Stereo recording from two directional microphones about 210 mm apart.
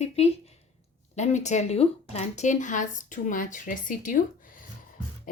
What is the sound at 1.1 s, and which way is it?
Speech, 35° left (ahead or behind).